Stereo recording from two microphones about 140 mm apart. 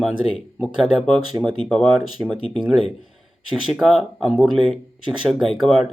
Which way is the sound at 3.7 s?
5° right (ahead or behind).